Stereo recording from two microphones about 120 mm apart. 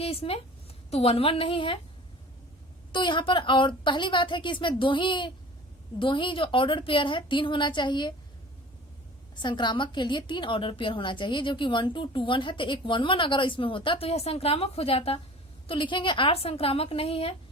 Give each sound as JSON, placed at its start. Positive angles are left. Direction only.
{"t": 0.0, "sound": "a woman's voice", "side_deg": 55}
{"t": 2.9, "sound": "a woman's voice", "side_deg": 40}
{"t": 9.4, "sound": "a woman's voice", "side_deg": 40}